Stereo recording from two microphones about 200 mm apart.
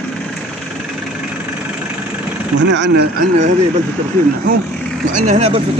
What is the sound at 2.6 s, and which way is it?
Speech, 60° right (ahead or behind).